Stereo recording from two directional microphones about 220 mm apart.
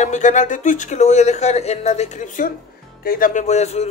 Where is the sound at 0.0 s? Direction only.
35° left (ahead or behind).